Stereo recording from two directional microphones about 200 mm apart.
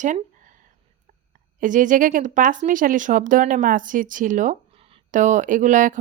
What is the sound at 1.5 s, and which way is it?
Speech, 40° right (ahead or behind).